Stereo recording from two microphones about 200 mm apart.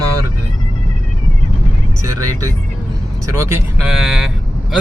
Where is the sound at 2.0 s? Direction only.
15° right (ahead or behind).